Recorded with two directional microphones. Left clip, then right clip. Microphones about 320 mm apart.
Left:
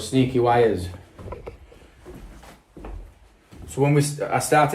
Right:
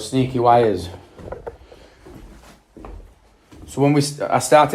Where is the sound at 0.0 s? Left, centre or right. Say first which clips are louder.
Right 3 dB; centre.